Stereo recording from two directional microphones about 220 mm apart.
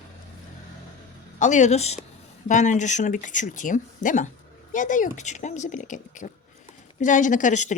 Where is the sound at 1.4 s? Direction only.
35° left (ahead or behind).